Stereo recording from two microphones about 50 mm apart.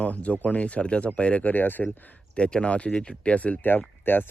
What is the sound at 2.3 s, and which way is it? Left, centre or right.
Speech, left.